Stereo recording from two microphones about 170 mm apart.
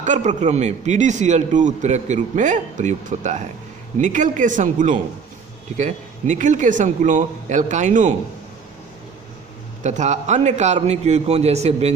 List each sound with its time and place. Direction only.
0.0 s speech: 45° right (ahead or behind)
9.8 s a man's voice: 45° right (ahead or behind)